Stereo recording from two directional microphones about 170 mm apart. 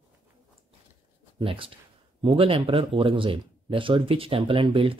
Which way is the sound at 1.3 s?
30° right (ahead or behind).